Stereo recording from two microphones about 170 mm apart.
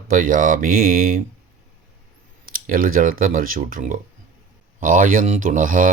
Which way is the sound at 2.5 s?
55° right (ahead or behind).